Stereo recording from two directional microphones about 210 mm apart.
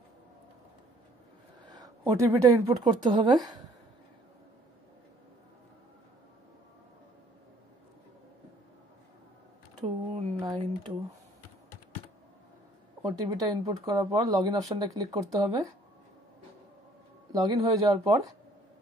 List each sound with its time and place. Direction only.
1.7 s speech: 15° right (ahead or behind)
9.8 s a sound: 25° right (ahead or behind)
13.0 s speech: 15° right (ahead or behind)
17.3 s speech: 20° right (ahead or behind)